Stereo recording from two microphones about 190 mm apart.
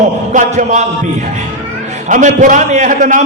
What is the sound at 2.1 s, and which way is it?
A man's voice, 40° right (ahead or behind).